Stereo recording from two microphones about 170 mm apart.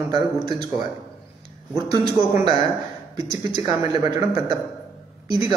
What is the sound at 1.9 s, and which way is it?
Speech, 20° right (ahead or behind).